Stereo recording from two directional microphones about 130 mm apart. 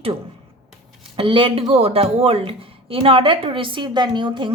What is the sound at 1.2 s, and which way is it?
A woman's voice, 40° right (ahead or behind).